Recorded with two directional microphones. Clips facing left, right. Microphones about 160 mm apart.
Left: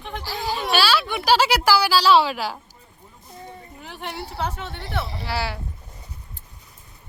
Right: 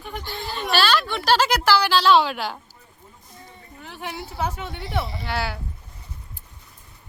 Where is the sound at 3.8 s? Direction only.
5° right (ahead or behind).